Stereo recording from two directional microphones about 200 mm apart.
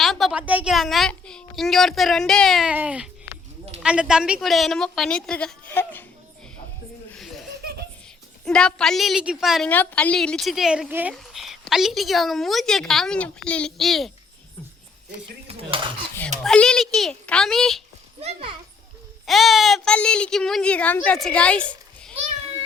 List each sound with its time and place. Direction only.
0.0 s a woman's voice: centre (ahead or behind)
7.1 s laughter: centre (ahead or behind)
7.6 s giggle: 50° right (ahead or behind)
8.4 s a woman's voice: 5° left (ahead or behind)
16.4 s a woman's voice: 5° left (ahead or behind)
18.2 s a child's voice: 30° right (ahead or behind)
19.2 s a woman's voice: centre (ahead or behind)